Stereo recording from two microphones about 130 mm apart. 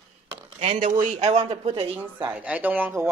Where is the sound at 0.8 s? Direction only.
80° right.